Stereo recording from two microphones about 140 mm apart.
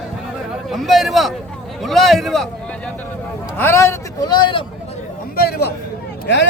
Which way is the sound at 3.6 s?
20° left (ahead or behind).